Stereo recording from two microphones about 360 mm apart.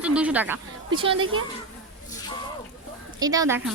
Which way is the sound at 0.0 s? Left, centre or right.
Centre.